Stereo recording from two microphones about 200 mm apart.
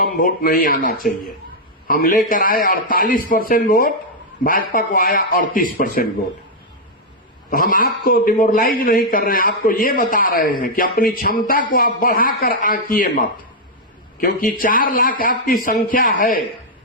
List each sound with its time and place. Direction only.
0.0 s a man's voice: 45° left (ahead or behind)
7.5 s a man's voice: 45° left (ahead or behind)